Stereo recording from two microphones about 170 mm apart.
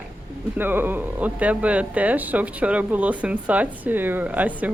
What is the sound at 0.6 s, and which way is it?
Speech, 10° right (ahead or behind).